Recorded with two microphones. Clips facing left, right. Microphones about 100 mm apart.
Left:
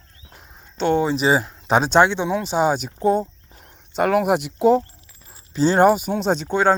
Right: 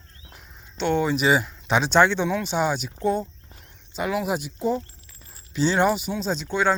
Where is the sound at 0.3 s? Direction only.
35° left (ahead or behind).